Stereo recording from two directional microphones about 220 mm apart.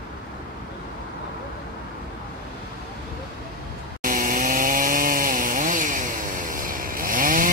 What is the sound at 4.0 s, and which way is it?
Chainsaw, 40° right (ahead or behind).